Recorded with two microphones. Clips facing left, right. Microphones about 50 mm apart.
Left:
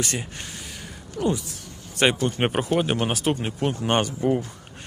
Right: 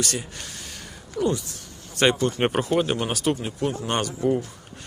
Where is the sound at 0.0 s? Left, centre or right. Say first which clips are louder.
Even; left.